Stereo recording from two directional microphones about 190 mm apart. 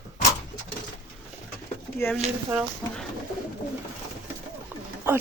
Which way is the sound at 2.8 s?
15° left (ahead or behind).